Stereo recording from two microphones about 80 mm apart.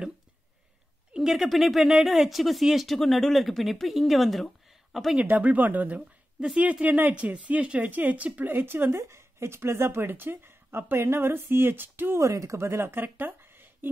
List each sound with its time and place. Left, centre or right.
1.1 s speech: centre
5.2 s speech: right
12.2 s a woman's voice: right